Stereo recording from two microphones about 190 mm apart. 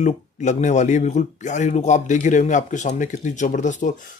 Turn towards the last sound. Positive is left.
turn(degrees=40)  # may be behind; listen again after turning